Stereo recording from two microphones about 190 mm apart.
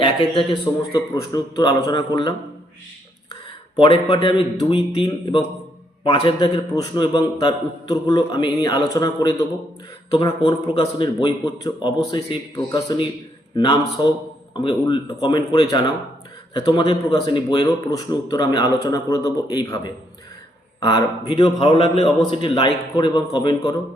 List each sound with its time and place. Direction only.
0.0 s a man's voice: 25° left (ahead or behind)
3.8 s a man's voice: 25° left (ahead or behind)